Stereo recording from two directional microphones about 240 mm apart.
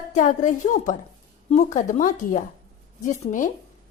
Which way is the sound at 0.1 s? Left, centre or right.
Left.